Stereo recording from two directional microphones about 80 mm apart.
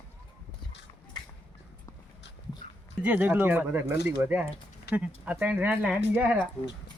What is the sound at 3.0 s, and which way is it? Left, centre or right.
Speech, centre.